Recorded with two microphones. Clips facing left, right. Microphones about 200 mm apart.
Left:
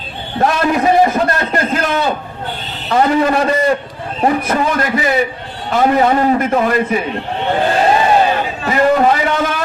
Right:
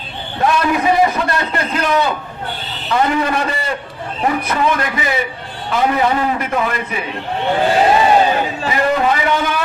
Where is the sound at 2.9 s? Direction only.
40° left (ahead or behind).